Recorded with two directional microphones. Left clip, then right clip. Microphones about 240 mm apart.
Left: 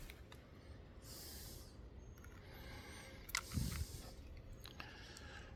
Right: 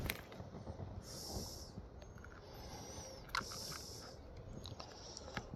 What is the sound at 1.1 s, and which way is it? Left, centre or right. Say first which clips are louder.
Snort: right 7 dB; left.